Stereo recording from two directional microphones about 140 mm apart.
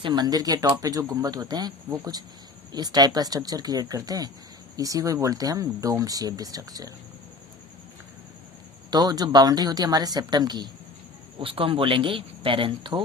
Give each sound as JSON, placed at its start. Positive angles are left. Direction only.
{"t": 0.0, "sound": "speech", "side_deg": -30}
{"t": 8.9, "sound": "speech", "side_deg": -30}